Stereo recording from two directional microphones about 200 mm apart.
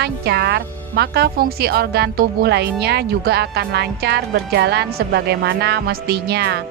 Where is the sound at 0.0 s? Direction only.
55° right (ahead or behind).